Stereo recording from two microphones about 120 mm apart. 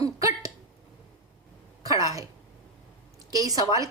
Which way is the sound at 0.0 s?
30° right (ahead or behind).